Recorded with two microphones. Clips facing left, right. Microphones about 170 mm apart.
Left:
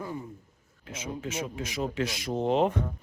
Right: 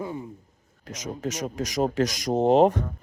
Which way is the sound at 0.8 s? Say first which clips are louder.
Right 4 dB; 40° right (ahead or behind).